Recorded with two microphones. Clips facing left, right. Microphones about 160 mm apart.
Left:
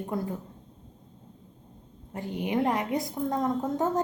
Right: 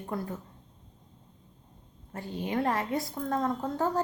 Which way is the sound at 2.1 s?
15° left (ahead or behind).